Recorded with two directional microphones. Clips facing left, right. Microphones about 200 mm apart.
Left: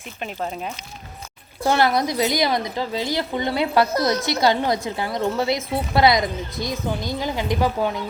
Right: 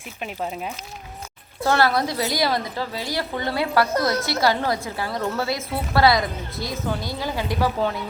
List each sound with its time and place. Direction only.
1.6 s a woman's voice: 15° left (ahead or behind)